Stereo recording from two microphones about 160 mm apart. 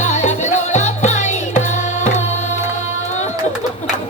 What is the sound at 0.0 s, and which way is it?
Music, 45° left (ahead or behind).